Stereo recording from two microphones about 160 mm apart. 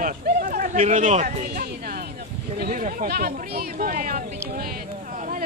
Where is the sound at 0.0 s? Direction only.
65° right (ahead or behind).